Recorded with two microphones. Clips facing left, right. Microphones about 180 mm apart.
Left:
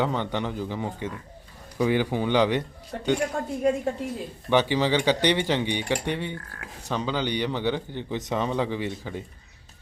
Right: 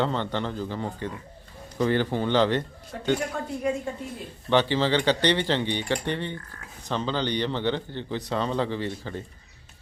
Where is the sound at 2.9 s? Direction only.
40° left (ahead or behind).